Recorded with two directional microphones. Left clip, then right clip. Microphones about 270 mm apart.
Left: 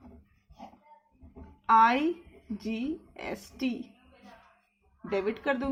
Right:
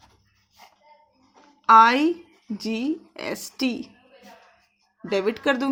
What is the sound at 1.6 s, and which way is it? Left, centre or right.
Speech, right.